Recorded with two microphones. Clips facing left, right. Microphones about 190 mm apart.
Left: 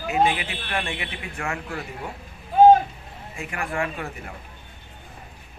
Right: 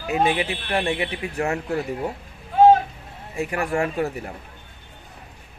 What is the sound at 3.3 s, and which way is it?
Speech, 40° right (ahead or behind).